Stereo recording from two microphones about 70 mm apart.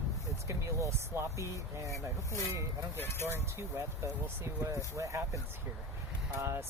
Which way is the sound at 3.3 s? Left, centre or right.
Right.